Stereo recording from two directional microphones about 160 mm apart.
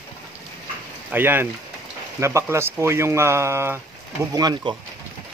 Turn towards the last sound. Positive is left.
turn(degrees=-25)  # may be behind; listen again after turning